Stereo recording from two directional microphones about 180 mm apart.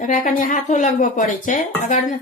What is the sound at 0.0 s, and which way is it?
Speech, 45° left (ahead or behind).